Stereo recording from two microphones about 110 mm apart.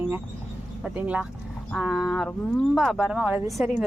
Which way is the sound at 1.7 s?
Centre (ahead or behind).